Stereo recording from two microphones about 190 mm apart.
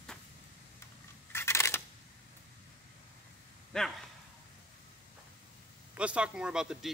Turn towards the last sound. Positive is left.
turn(degrees=-5)  # may be behind; listen again after turning